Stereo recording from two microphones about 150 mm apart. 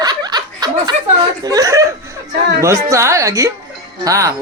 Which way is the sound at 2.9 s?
20° right (ahead or behind).